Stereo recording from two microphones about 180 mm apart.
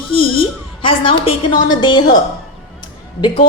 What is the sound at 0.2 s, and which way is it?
A woman's voice, 30° left (ahead or behind).